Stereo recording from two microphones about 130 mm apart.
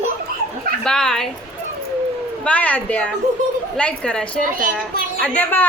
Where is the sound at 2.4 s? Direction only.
10° left (ahead or behind).